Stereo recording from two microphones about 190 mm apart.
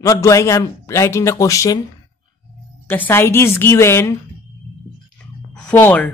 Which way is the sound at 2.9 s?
10° left (ahead or behind).